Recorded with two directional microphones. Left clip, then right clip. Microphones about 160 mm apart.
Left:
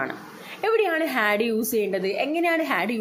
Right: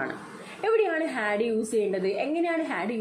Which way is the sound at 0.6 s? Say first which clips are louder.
Left 2 dB; 20° left (ahead or behind).